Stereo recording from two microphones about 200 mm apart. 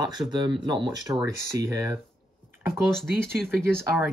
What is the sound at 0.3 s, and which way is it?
Speech, 25° right (ahead or behind).